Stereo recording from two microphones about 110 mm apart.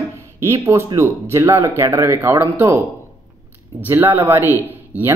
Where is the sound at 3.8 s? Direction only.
20° right (ahead or behind).